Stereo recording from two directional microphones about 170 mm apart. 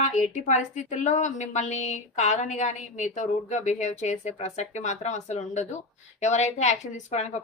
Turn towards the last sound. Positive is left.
turn(degrees=40)  # may be behind; listen again after turning